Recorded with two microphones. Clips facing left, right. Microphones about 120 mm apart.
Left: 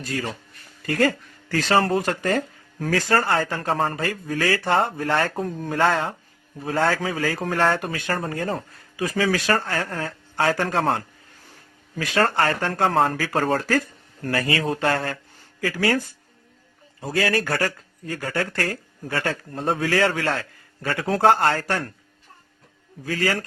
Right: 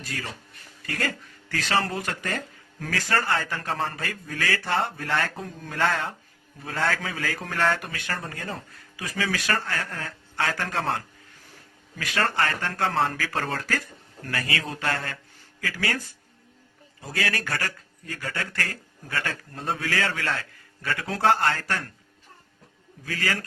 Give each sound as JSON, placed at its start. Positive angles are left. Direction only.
{"t": 0.9, "sound": "speech", "side_deg": 35}
{"t": 5.8, "sound": "speech", "side_deg": 30}
{"t": 13.6, "sound": "speech", "side_deg": 30}
{"t": 17.0, "sound": "a man's voice", "side_deg": 30}
{"t": 21.2, "sound": "speech", "side_deg": 30}
{"t": 23.0, "sound": "speech", "side_deg": 30}